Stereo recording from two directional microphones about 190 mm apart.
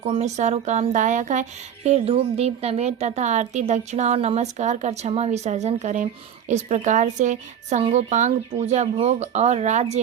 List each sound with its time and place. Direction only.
0.0 s speech: 35° right (ahead or behind)